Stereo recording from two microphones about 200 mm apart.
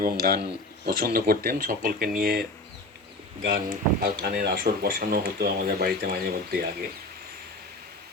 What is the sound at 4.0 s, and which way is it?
Speech, 50° right (ahead or behind).